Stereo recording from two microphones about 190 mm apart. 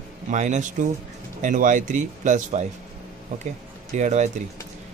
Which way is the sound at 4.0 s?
40° right (ahead or behind).